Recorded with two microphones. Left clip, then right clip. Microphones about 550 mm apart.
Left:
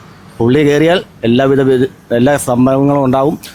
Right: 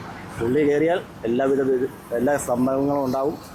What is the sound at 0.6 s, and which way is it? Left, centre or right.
Speech, left.